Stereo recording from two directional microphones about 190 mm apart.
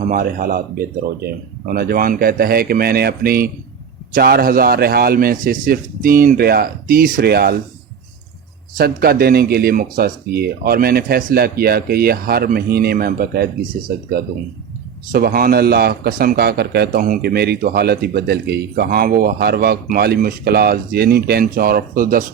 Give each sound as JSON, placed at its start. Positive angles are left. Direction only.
{"t": 0.0, "sound": "a man's voice", "side_deg": -45}
{"t": 8.8, "sound": "a man's voice", "side_deg": -50}